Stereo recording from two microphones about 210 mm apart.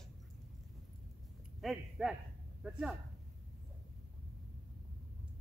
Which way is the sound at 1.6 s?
Centre (ahead or behind).